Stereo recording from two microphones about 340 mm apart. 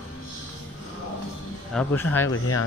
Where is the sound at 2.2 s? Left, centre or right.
Left.